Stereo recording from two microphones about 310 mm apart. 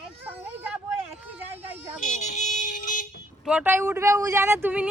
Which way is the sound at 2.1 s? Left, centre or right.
Left.